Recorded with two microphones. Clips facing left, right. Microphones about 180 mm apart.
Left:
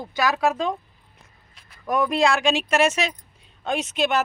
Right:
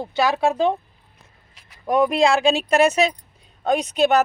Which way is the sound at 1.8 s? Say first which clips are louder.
Right 3 dB; 25° right (ahead or behind).